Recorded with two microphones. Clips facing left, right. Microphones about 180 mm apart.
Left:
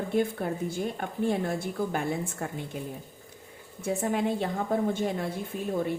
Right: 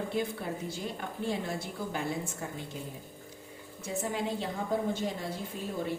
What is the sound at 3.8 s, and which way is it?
A woman's voice, 55° left (ahead or behind).